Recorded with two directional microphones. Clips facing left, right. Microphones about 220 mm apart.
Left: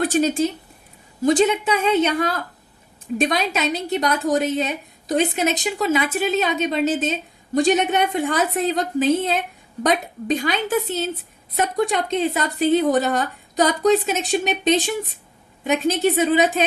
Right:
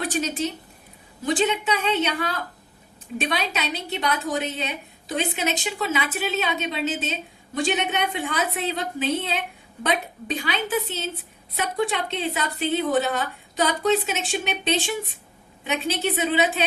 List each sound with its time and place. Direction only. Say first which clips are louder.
0.0 s a woman's voice: left 7 dB; 45° left (ahead or behind)